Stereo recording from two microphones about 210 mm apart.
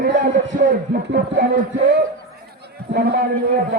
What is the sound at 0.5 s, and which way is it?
Speech, 40° right (ahead or behind).